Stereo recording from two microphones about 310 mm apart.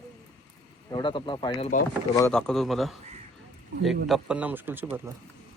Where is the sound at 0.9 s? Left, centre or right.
Centre.